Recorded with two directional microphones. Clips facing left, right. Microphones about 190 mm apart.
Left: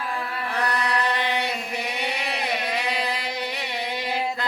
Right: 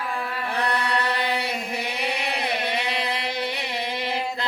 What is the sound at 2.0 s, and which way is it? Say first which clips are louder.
Music: right 2 dB; 30° right (ahead or behind).